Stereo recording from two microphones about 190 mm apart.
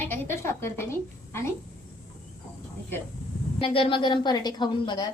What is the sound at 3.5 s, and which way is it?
A woman's voice, 30° left (ahead or behind).